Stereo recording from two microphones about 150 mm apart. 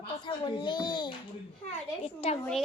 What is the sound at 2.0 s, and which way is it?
Speech, 45° left (ahead or behind).